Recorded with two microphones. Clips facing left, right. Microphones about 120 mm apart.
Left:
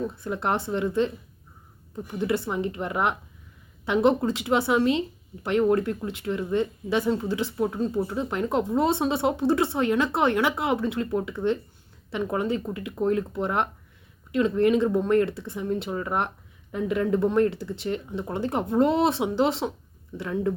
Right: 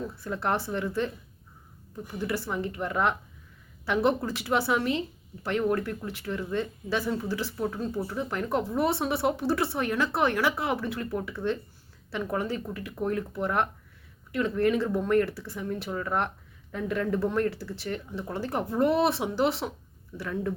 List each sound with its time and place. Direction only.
0.1 s a woman's voice: 20° left (ahead or behind)
2.1 s a woman's voice: 20° left (ahead or behind)